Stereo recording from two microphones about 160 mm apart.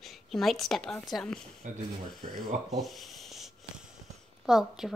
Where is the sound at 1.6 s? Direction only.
50° right (ahead or behind).